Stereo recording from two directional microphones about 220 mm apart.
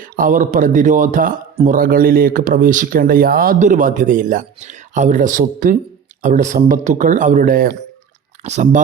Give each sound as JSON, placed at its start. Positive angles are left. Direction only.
{"t": 0.0, "sound": "speech", "side_deg": -40}